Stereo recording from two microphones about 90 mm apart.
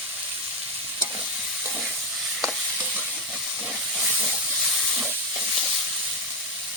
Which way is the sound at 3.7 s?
Centre (ahead or behind).